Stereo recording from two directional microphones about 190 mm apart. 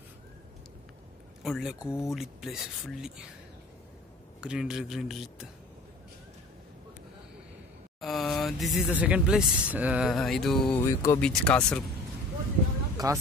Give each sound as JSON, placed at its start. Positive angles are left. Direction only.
{"t": 1.4, "sound": "speech", "side_deg": 0}
{"t": 4.4, "sound": "speech", "side_deg": -5}
{"t": 8.0, "sound": "a sound", "side_deg": 0}
{"t": 8.7, "sound": "speech", "side_deg": -5}
{"t": 10.9, "sound": "speech", "side_deg": 15}
{"t": 11.1, "sound": "speech", "side_deg": 5}
{"t": 12.9, "sound": "speech", "side_deg": -20}